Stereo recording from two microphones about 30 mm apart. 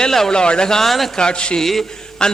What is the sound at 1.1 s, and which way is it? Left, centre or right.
A man's voice, left.